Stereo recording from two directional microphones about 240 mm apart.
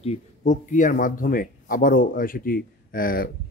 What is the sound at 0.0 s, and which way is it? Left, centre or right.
Speech, left.